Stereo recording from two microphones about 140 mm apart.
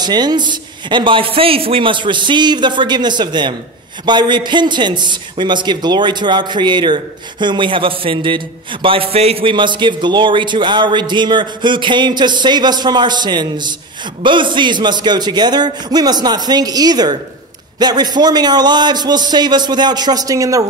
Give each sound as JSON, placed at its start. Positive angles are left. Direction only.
{"t": 0.0, "sound": "a man's voice", "side_deg": -30}